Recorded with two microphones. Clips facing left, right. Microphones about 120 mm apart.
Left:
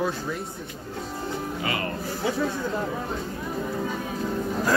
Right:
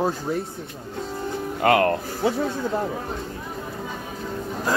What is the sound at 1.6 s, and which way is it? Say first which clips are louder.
Speech: right 14 dB; 65° right (ahead or behind).